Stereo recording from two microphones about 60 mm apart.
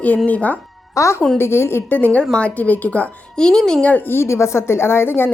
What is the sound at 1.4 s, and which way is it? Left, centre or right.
Speech, left.